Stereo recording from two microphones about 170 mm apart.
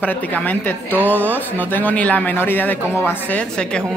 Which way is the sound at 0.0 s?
10° left (ahead or behind).